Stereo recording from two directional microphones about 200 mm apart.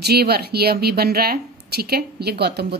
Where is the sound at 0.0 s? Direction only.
55° right (ahead or behind).